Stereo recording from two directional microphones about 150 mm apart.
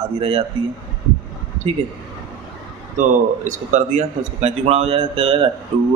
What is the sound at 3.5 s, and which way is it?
A man's voice, 55° right (ahead or behind).